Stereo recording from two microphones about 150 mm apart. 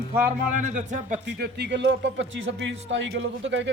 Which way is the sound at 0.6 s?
55° right (ahead or behind).